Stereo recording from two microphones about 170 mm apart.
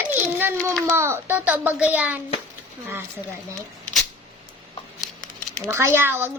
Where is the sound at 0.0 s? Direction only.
10° right (ahead or behind).